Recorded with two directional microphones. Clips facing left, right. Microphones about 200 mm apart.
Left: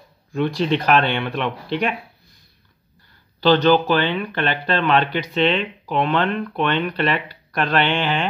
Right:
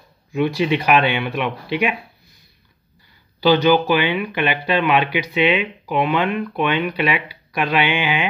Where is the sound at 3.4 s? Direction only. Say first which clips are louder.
Even; 10° right (ahead or behind).